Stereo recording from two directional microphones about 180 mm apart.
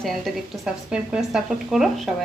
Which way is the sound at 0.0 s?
Centre (ahead or behind).